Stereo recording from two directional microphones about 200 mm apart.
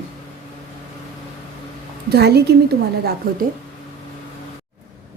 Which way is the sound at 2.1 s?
55° right (ahead or behind).